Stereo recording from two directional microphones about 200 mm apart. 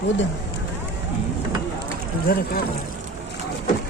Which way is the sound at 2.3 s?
50° left (ahead or behind).